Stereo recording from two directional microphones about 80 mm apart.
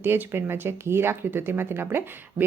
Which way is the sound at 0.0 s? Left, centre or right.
Right.